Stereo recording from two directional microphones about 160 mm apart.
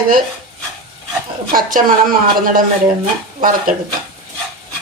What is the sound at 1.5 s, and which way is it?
Speech, 60° right (ahead or behind).